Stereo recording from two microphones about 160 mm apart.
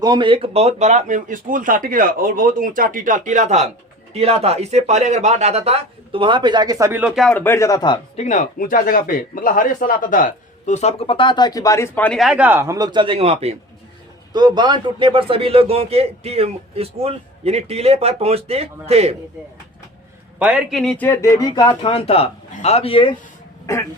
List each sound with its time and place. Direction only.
0.0 s a man's voice: 30° right (ahead or behind)
7.0 s speech: centre (ahead or behind)
7.3 s speech: 15° left (ahead or behind)
8.1 s speech: 45° left (ahead or behind); by 13.6 s 40° right (ahead or behind)
14.3 s a man's voice: 25° right (ahead or behind)
20.4 s speech: 5° right (ahead or behind); by 23.1 s 35° left (ahead or behind)